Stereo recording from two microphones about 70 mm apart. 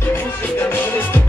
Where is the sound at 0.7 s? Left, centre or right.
Left.